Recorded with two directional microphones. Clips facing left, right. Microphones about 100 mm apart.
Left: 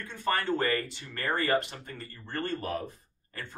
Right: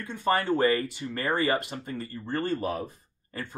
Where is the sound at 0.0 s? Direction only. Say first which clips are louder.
Right 4 dB; 15° right (ahead or behind).